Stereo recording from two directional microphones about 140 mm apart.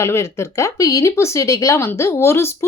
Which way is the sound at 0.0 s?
20° left (ahead or behind).